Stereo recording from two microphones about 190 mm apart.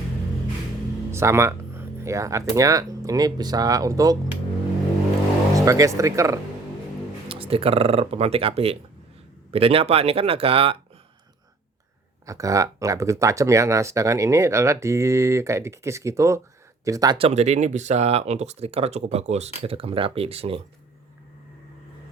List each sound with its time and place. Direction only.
1.1 s speech: 15° right (ahead or behind)
5.5 s speech: 15° right (ahead or behind)
7.3 s speech: 30° right (ahead or behind)
12.2 s speech: 15° right (ahead or behind)
17.2 s speech: 35° right (ahead or behind)